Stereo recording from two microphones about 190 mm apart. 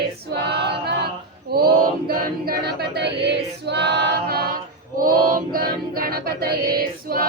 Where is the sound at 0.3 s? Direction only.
60° right (ahead or behind).